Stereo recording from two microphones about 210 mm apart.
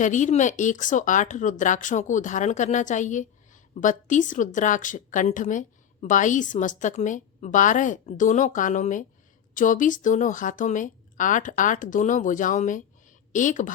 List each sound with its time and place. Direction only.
0.0 s speech: 35° left (ahead or behind)